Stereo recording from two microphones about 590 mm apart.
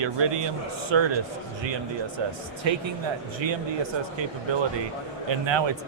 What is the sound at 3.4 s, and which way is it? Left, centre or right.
Speech, right.